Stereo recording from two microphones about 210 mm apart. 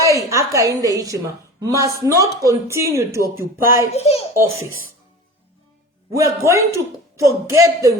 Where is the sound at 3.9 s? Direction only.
30° left (ahead or behind).